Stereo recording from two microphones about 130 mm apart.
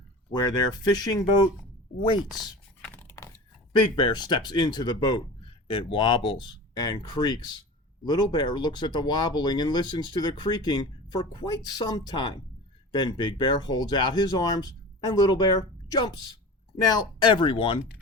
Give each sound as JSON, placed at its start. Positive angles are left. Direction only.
{"t": 0.7, "sound": "speech", "side_deg": 30}
{"t": 2.8, "sound": "typing", "side_deg": 15}
{"t": 3.7, "sound": "speech", "side_deg": 35}